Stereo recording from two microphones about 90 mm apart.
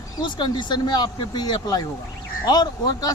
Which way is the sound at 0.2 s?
55° left (ahead or behind).